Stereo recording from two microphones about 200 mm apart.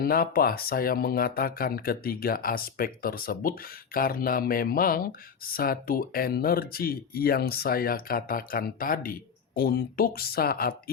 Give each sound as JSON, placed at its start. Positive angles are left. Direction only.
{"t": 0.0, "sound": "speech", "side_deg": 50}